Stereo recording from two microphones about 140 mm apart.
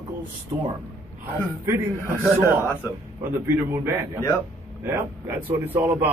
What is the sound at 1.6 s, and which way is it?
A man's voice, 20° right (ahead or behind).